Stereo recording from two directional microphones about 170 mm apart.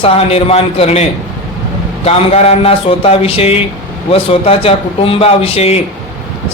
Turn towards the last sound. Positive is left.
turn(degrees=35)  # may be behind; listen again after turning